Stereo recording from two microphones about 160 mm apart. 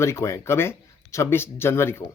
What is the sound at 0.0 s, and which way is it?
Speech, 15° left (ahead or behind).